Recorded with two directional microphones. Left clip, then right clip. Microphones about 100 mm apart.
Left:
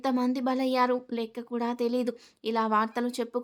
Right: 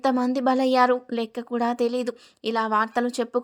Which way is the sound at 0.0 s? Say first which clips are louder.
Right 6 dB; 45° right (ahead or behind).